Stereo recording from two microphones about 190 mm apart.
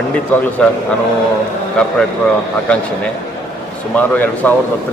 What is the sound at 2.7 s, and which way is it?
Speech, 5° left (ahead or behind).